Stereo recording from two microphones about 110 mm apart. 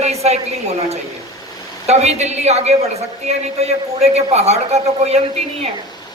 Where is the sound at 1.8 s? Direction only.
80° right.